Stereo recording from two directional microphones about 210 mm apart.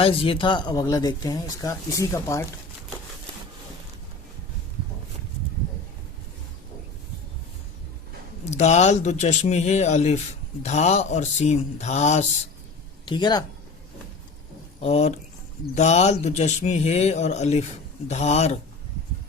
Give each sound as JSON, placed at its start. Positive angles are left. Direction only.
{"t": 0.0, "sound": "speech", "side_deg": 25}
{"t": 8.4, "sound": "speech", "side_deg": 30}
{"t": 13.1, "sound": "speech", "side_deg": 20}
{"t": 14.8, "sound": "speech", "side_deg": 30}